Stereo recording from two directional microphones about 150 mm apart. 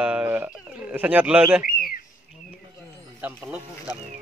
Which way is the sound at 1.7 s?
75° left (ahead or behind).